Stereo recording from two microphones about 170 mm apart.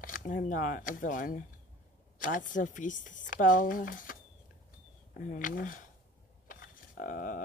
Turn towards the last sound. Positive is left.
turn(degrees=50)  # may be behind; listen again after turning